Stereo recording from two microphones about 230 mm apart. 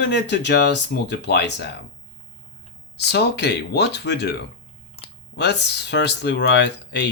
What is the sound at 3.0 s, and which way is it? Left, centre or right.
Speech, left.